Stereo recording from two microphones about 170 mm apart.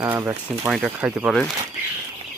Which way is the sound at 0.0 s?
15° right (ahead or behind).